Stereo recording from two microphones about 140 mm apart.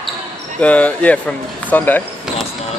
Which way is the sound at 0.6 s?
10° left (ahead or behind).